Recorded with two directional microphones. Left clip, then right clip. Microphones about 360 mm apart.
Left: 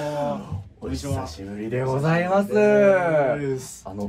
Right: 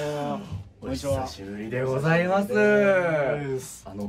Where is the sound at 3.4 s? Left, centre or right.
Centre.